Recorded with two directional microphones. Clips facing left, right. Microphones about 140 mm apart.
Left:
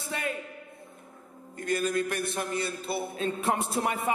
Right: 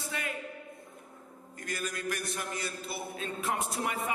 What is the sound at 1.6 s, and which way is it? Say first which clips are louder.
A man's voice: left 9 dB; 30° left (ahead or behind).